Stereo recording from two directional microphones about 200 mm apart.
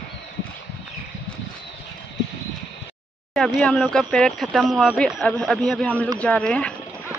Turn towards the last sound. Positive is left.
turn(degrees=5)  # may be behind; listen again after turning